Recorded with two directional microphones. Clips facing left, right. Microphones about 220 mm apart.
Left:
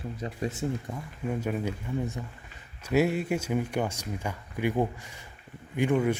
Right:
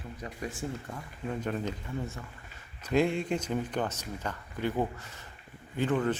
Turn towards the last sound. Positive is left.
turn(degrees=10)  # may be behind; listen again after turning